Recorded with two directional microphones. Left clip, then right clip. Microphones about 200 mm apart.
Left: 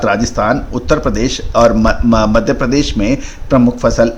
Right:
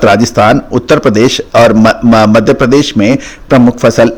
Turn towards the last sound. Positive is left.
turn(degrees=-40)  # may be behind; listen again after turning